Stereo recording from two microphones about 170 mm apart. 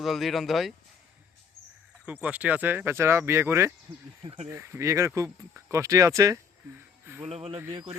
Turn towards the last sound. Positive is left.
turn(degrees=-35)  # may be behind; listen again after turning